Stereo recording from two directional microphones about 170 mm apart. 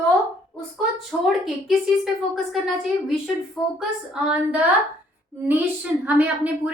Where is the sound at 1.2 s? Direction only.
Centre (ahead or behind).